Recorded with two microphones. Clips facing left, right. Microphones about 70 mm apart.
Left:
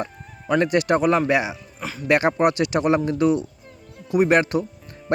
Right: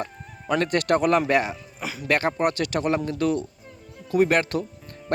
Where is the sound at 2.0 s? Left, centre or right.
Centre.